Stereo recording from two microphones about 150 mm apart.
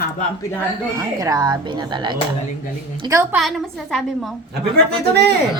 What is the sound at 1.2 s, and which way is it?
Speech, 25° right (ahead or behind).